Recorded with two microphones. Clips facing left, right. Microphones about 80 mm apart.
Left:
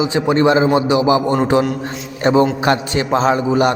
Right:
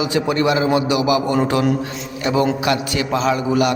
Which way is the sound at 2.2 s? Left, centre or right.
Left.